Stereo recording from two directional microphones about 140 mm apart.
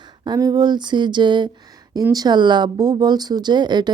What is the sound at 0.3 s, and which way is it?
Speech, 30° right (ahead or behind).